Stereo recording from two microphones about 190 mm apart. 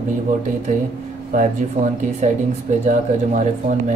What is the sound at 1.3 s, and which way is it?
Speech, 40° right (ahead or behind).